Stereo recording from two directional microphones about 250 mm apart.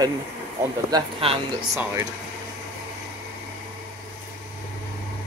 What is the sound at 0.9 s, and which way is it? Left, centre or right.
Speech, right.